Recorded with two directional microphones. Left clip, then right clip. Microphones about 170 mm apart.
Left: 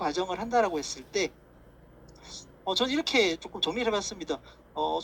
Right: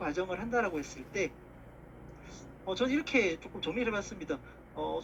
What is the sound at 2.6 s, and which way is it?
A man's voice, 45° left (ahead or behind).